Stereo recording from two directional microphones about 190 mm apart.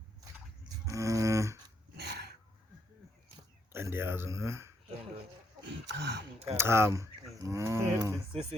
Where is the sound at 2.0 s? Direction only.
60° right (ahead or behind).